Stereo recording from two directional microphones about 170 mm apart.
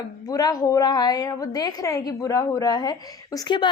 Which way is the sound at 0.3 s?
20° left (ahead or behind).